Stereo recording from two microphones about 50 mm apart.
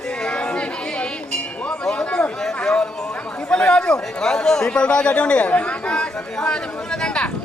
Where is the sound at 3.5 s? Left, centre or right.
Centre.